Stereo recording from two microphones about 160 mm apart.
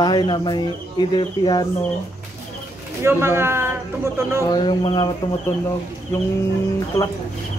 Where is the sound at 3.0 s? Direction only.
15° right (ahead or behind).